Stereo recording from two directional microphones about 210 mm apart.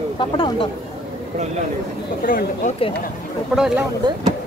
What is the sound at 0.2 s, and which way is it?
Speech, 25° left (ahead or behind).